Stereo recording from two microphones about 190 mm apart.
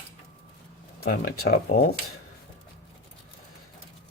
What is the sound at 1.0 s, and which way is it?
Speech, 55° left (ahead or behind).